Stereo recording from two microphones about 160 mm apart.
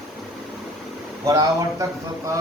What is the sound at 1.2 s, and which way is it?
Speech, 20° right (ahead or behind).